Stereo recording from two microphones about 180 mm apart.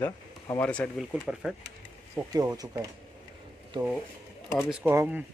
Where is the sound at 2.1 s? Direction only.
20° right (ahead or behind).